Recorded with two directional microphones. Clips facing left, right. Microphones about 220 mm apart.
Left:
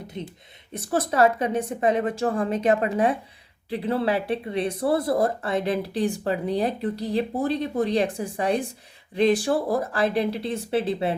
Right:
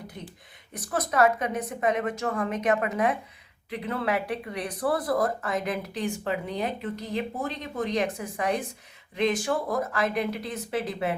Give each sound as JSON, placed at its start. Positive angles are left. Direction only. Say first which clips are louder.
{"t": 0.1, "sound": "speech", "louder": "left 7 dB", "side_deg": 25}